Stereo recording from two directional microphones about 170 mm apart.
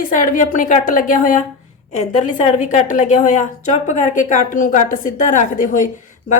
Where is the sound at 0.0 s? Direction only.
50° left (ahead or behind).